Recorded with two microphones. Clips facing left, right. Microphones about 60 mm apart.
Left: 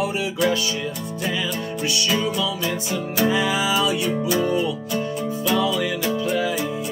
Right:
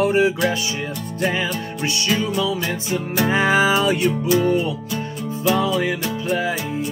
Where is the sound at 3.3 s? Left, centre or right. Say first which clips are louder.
Right 9 dB; right.